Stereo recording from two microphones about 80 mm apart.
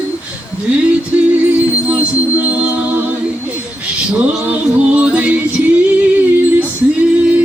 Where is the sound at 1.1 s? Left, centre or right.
Centre.